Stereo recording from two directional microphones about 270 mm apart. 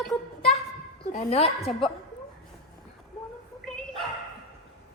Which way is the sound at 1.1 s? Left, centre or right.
Left.